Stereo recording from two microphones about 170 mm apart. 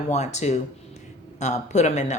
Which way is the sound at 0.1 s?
40° left (ahead or behind).